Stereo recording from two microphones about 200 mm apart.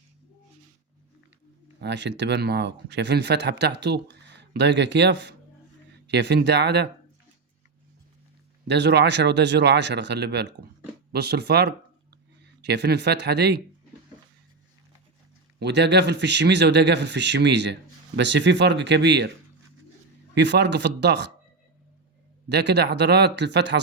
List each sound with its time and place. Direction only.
1.8 s speech: 60° right (ahead or behind)
8.6 s speech: 60° right (ahead or behind)
15.5 s speech: 60° right (ahead or behind)
20.3 s speech: 60° right (ahead or behind)
22.4 s speech: 60° right (ahead or behind)